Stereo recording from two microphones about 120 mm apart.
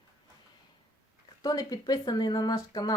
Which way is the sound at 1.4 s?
30° left (ahead or behind).